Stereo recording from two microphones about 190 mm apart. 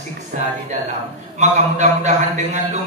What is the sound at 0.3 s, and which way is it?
A man's voice, 40° right (ahead or behind).